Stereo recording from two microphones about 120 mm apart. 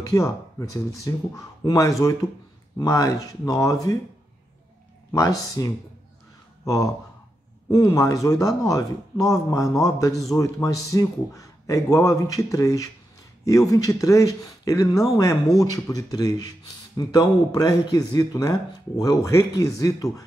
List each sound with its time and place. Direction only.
0.1 s speech: 25° left (ahead or behind)
5.1 s speech: 30° left (ahead or behind)